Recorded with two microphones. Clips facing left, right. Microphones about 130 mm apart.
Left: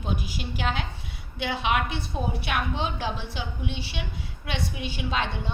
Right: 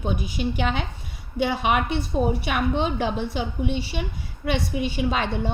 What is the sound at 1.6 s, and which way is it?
A woman's voice, 50° right (ahead or behind).